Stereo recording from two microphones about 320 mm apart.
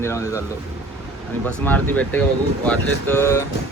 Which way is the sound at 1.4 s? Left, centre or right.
Centre.